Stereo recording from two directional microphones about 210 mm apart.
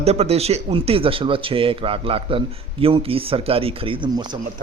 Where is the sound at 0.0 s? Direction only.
30° right (ahead or behind).